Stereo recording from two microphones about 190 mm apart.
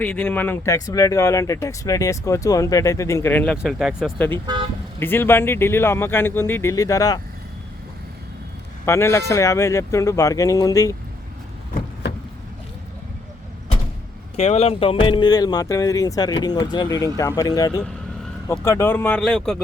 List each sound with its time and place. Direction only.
0.0 s speech: 10° left (ahead or behind)
4.9 s speech: 10° left (ahead or behind)
8.9 s speech: 15° left (ahead or behind)
14.3 s speech: 30° left (ahead or behind); by 19.5 s 5° left (ahead or behind)